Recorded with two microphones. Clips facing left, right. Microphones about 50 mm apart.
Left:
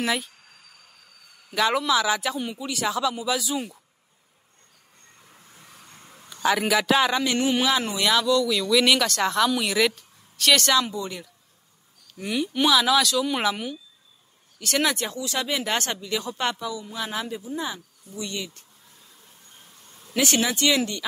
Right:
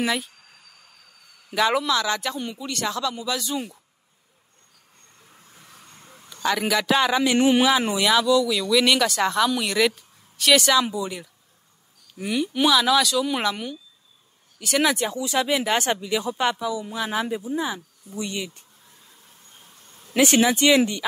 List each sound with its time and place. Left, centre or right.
0.0 s speech: centre
1.5 s speech: centre
5.8 s a sound: centre
7.3 s speech: right
8.0 s speech: centre
19.8 s a sound: centre
20.2 s speech: right